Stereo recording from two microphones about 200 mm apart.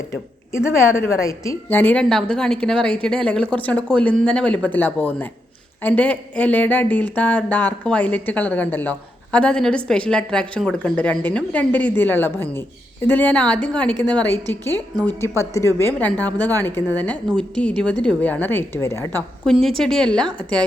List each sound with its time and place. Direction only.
0.5 s a woman's voice: 15° left (ahead or behind)
14.9 s a woman's voice: 20° right (ahead or behind)
15.4 s a woman's voice: 15° left (ahead or behind)
19.5 s a woman's voice: centre (ahead or behind)